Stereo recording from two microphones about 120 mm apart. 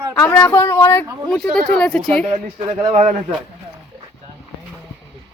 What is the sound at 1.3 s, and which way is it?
Speech, 5° left (ahead or behind).